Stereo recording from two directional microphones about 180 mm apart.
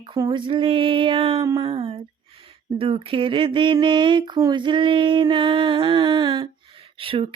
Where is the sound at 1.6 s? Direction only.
30° right (ahead or behind).